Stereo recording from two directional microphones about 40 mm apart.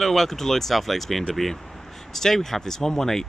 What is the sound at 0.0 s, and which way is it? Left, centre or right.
Speech, centre.